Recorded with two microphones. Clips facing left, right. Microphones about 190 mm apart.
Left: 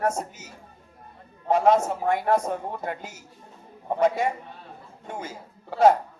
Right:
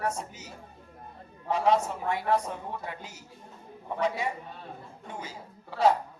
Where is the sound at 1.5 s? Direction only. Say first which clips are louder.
Left 5 dB; 45° left (ahead or behind).